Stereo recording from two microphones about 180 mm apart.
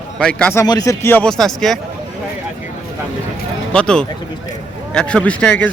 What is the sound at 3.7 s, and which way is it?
Speech, 5° left (ahead or behind).